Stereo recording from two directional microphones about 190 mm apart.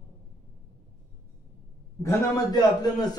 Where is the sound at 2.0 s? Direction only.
15° left (ahead or behind).